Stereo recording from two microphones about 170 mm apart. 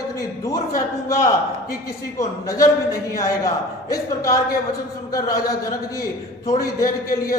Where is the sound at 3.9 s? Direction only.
20° left (ahead or behind).